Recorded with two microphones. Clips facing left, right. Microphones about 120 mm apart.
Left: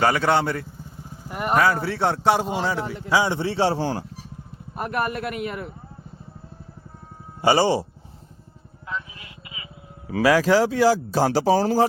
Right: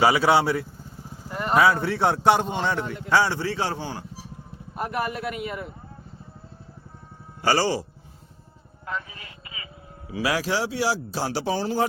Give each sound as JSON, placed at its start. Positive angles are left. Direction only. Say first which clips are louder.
{"t": 0.0, "sound": "speech", "louder": "right 1 dB", "side_deg": -5}
{"t": 1.3, "sound": "speech", "louder": "left 2 dB", "side_deg": 15}
{"t": 1.5, "sound": "speech", "louder": "right 1 dB", "side_deg": 0}
{"t": 3.8, "sound": "speech", "louder": "left 8 dB", "side_deg": 40}
{"t": 4.8, "sound": "speech", "louder": "left 2 dB", "side_deg": 55}
{"t": 7.4, "sound": "speech", "louder": "left 4 dB", "side_deg": 20}
{"t": 8.9, "sound": "speech", "louder": "even", "side_deg": -45}
{"t": 10.1, "sound": "speech", "louder": "left 8 dB", "side_deg": 50}